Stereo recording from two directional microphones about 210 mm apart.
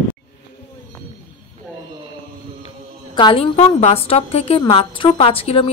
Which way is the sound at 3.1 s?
25° left (ahead or behind).